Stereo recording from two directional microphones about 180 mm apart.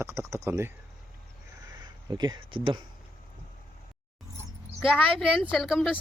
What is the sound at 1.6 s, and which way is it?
Speech, 25° right (ahead or behind).